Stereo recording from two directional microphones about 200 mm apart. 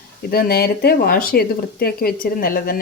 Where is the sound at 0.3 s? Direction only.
50° left (ahead or behind).